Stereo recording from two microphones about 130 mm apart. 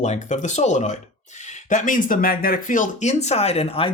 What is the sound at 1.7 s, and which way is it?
Speech, 85° left.